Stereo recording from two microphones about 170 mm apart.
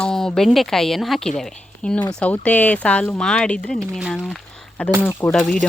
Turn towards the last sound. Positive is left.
turn(degrees=5)  # may be behind; listen again after turning